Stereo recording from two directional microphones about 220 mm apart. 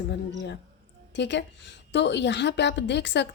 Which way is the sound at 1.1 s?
50° left (ahead or behind).